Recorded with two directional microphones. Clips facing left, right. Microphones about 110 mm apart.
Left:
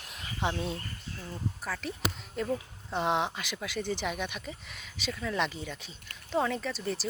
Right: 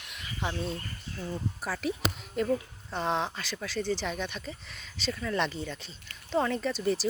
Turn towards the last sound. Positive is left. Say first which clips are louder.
# right 5 dB
turn(degrees=0)  # may be behind; listen again after turning